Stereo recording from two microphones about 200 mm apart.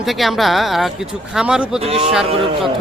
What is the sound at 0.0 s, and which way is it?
Speech, centre (ahead or behind).